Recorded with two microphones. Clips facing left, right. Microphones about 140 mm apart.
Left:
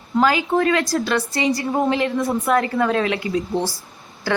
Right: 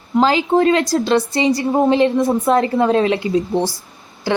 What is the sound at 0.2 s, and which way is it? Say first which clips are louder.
A woman's voice: right 4 dB; 25° right (ahead or behind).